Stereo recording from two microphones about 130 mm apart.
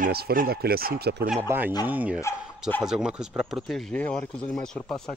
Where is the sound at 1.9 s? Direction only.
10° right (ahead or behind); by 5.1 s 5° left (ahead or behind).